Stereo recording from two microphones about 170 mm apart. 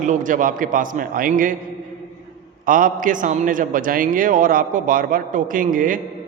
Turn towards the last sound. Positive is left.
turn(degrees=-55)  # may be behind; listen again after turning